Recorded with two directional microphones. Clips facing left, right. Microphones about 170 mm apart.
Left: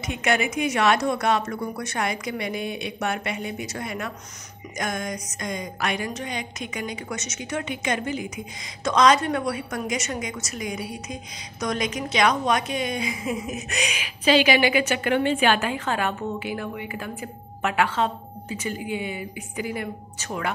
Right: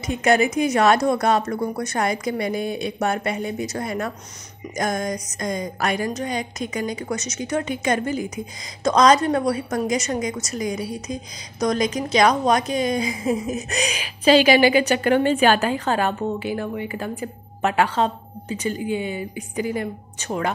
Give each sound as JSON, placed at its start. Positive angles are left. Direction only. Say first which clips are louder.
{"t": 0.0, "sound": "a woman's voice", "louder": "right 6 dB", "side_deg": -40}